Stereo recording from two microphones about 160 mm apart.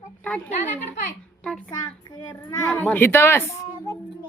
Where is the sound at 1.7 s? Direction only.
30° left (ahead or behind).